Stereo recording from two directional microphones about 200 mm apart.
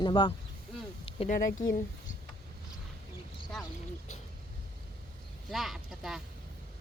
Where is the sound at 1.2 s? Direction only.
40° left (ahead or behind).